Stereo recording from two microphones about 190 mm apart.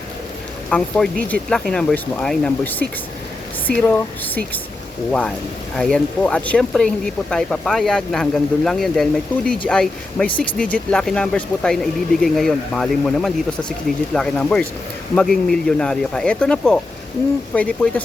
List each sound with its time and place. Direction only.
0.7 s speech: 5° left (ahead or behind)
5.7 s speech: 5° left (ahead or behind)